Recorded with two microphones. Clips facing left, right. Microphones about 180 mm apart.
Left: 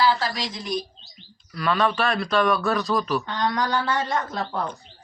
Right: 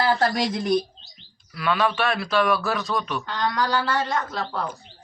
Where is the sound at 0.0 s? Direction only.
55° right (ahead or behind).